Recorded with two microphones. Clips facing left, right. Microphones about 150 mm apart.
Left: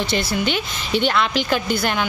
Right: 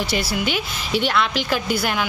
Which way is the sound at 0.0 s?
10° right (ahead or behind).